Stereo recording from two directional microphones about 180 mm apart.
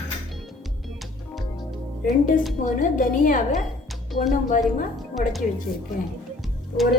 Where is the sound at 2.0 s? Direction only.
45° left (ahead or behind).